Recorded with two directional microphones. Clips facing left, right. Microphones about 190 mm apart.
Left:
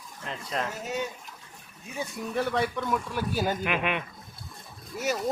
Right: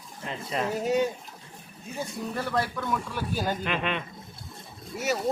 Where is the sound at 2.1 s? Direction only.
Centre (ahead or behind).